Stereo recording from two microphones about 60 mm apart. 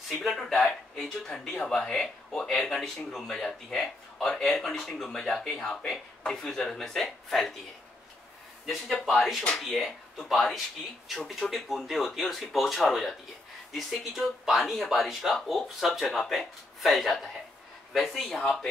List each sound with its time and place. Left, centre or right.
0.1 s speech: centre
8.6 s speech: centre
18.4 s speech: centre